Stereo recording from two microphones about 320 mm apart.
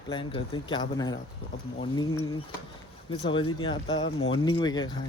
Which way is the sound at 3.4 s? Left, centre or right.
Centre.